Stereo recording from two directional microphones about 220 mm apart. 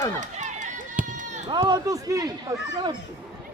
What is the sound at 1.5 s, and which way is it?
Speech, 20° right (ahead or behind).